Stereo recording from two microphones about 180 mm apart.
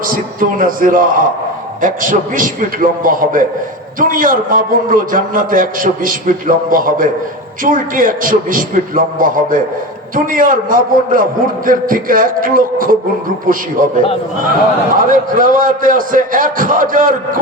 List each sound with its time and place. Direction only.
0.1 s a man's voice: 50° right (ahead or behind)